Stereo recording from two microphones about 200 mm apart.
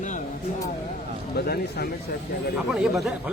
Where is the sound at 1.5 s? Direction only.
50° left (ahead or behind).